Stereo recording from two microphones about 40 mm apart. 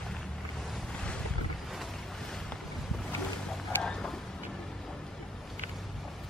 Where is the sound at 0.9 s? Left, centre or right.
Left.